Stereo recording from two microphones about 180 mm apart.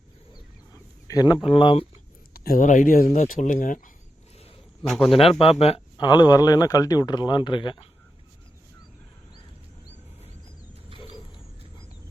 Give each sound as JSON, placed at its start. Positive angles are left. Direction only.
{"t": 1.0, "sound": "speech", "side_deg": 20}
{"t": 2.3, "sound": "speech", "side_deg": 55}
{"t": 4.9, "sound": "a man's voice", "side_deg": 0}
{"t": 5.4, "sound": "speech", "side_deg": 35}
{"t": 10.9, "sound": "wild animals", "side_deg": 30}